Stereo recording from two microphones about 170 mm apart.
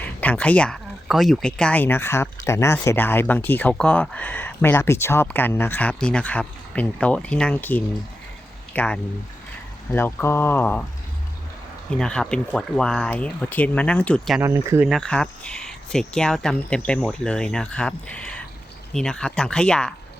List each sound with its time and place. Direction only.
0.0 s speech: 10° left (ahead or behind)
11.9 s speech: 5° left (ahead or behind)
14.4 s speech: 15° right (ahead or behind)
14.8 s speech: centre (ahead or behind)